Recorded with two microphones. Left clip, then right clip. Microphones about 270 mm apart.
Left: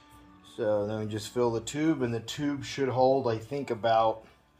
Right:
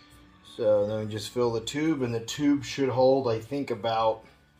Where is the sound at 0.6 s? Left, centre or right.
Left.